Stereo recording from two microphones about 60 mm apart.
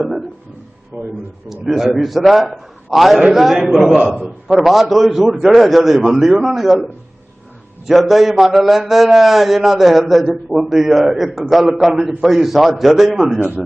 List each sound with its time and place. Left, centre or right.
0.9 s speech: right
1.5 s a man's voice: centre
3.9 s a man's voice: centre
4.4 s a man's voice: centre
7.9 s a man's voice: centre